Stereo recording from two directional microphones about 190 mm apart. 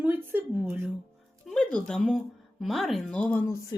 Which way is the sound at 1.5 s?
5° left (ahead or behind).